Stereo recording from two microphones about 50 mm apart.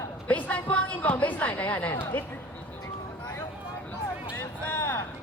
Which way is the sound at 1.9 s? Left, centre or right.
Left.